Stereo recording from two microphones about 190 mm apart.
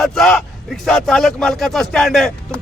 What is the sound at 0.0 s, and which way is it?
Speech, centre (ahead or behind).